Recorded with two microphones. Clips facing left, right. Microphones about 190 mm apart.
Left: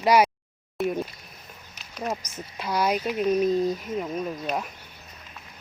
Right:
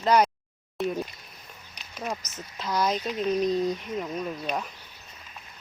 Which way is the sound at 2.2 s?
10° left (ahead or behind).